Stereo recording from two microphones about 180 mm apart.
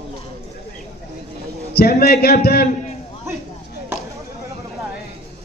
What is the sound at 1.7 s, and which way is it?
Speech, 60° left (ahead or behind).